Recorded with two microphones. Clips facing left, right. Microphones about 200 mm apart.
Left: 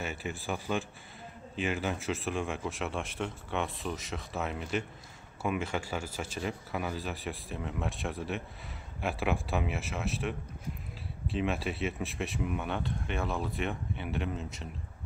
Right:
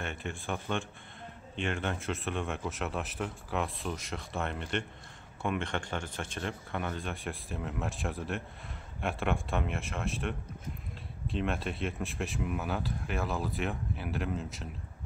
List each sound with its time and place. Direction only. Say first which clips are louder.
0.0 s speech: left 1 dB; 5° left (ahead or behind)